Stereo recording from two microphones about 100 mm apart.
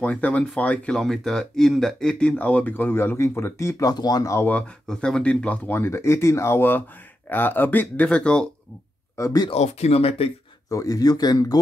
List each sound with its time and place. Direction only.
0.0 s speech: 15° left (ahead or behind); by 4.5 s 35° left (ahead or behind)
4.5 s speech: 10° left (ahead or behind)
9.1 s speech: 30° left (ahead or behind)
9.5 s speech: 90° left; by 10.3 s 75° left (ahead or behind)
10.7 s speech: 35° left (ahead or behind)